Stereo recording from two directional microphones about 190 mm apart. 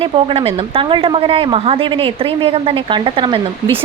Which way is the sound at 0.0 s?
30° right (ahead or behind).